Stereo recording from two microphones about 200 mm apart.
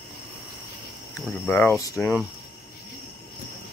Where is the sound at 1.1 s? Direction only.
10° left (ahead or behind).